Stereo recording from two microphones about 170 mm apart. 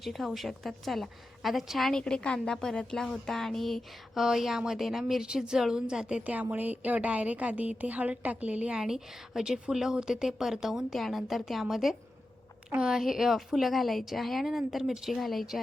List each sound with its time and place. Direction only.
0.0 s a woman's voice: centre (ahead or behind)